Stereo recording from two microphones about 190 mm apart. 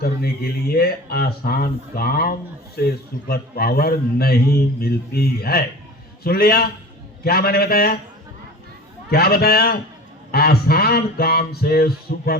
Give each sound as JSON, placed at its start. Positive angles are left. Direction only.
{"t": 0.0, "sound": "speech", "side_deg": 55}
{"t": 9.0, "sound": "speech", "side_deg": 55}